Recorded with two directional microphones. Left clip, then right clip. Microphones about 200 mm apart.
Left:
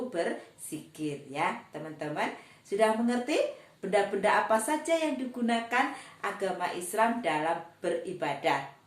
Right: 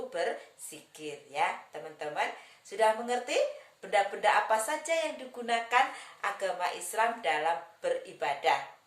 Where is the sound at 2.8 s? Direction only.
15° right (ahead or behind).